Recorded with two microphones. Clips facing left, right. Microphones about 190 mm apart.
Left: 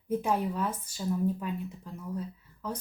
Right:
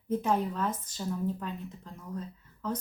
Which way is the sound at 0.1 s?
10° left (ahead or behind).